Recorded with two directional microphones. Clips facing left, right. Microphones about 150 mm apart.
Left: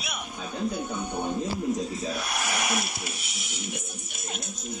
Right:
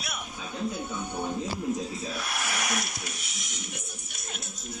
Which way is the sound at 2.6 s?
5° left (ahead or behind).